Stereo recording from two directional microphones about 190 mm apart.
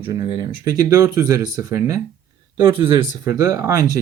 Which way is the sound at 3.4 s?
15° right (ahead or behind).